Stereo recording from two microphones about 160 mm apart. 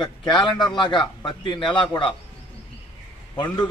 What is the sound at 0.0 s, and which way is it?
A man's voice, 30° left (ahead or behind).